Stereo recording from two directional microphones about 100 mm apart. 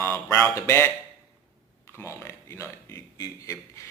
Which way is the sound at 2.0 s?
25° left (ahead or behind).